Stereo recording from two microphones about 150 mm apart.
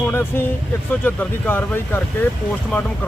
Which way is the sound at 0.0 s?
15° left (ahead or behind).